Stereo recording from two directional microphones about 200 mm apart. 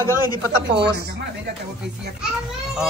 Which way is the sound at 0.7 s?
55° right (ahead or behind).